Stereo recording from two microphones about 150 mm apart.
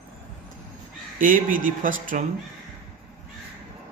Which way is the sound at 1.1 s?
65° right (ahead or behind).